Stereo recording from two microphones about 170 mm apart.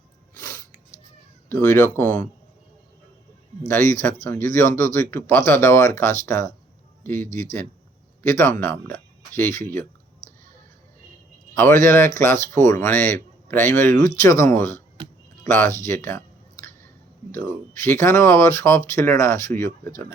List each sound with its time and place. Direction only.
1.5 s speech: 15° left (ahead or behind)
3.7 s speech: 15° left (ahead or behind)
8.3 s speech: 15° left (ahead or behind)
11.5 s speech: 15° left (ahead or behind)
15.8 s a sound: 15° left (ahead or behind)
17.3 s speech: 15° left (ahead or behind)